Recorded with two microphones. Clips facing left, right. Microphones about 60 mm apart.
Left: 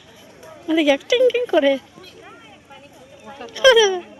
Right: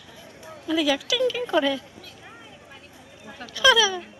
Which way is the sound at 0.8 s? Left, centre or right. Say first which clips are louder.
Left 8 dB; left.